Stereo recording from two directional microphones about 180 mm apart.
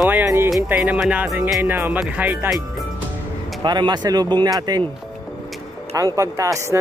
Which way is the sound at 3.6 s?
25° right (ahead or behind).